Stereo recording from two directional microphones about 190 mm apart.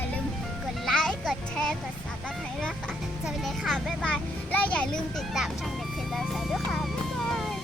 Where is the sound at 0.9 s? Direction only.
Centre (ahead or behind).